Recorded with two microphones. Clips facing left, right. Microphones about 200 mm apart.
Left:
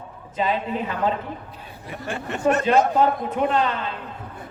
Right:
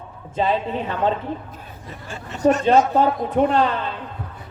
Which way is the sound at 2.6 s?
35° right (ahead or behind).